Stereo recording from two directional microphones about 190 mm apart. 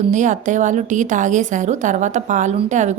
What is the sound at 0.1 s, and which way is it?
A woman's voice, 40° right (ahead or behind).